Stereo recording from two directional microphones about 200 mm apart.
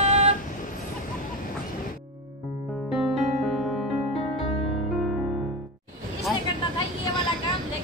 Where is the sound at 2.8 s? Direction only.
Centre (ahead or behind).